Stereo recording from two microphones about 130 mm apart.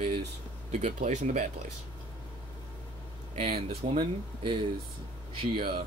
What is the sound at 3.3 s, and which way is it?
Speech, 50° right (ahead or behind).